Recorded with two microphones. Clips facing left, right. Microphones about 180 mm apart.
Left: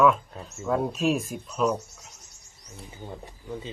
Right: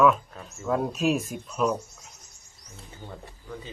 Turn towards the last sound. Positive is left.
turn(degrees=20)  # may be behind; listen again after turning